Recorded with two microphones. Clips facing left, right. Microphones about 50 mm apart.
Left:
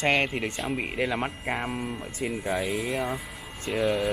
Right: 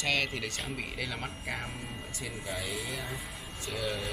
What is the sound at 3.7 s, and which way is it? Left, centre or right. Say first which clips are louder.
Speech: left 10 dB; left.